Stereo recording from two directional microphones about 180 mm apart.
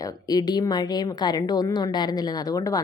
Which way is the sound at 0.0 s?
20° left (ahead or behind).